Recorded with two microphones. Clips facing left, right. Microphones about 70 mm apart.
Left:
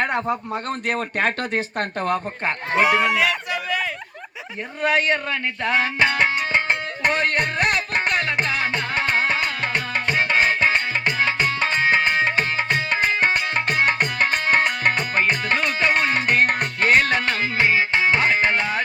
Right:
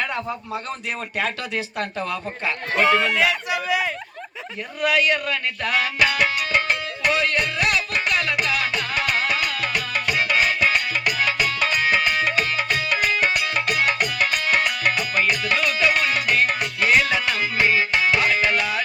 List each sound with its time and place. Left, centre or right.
0.3 s speech: left
2.7 s speech: centre
3.2 s speech: centre
4.8 s music: left